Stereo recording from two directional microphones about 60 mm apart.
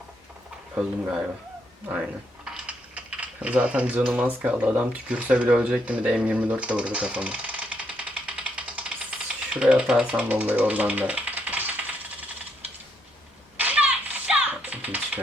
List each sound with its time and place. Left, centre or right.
0.8 s speech: right
2.4 s typing: centre
4.3 s speech: right
5.0 s speech: right
5.8 s typewriter: right
10.2 s speech: right
13.6 s typing: right